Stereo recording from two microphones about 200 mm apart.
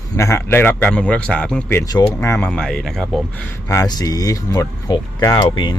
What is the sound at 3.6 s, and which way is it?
Speech, 15° left (ahead or behind).